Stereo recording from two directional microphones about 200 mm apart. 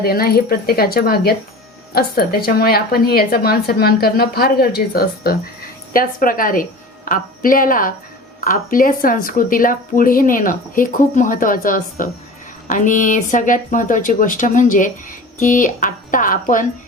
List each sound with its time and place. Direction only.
0.0 s a woman's voice: 50° left (ahead or behind)